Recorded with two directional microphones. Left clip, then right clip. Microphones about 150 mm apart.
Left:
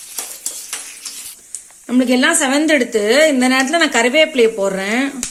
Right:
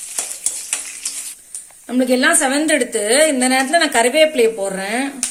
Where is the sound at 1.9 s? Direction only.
55° left (ahead or behind).